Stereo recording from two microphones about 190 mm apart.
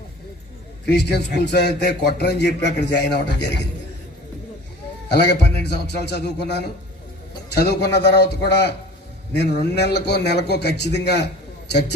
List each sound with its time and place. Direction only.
0.9 s a man's voice: 60° left (ahead or behind)
5.1 s a man's voice: 65° left (ahead or behind)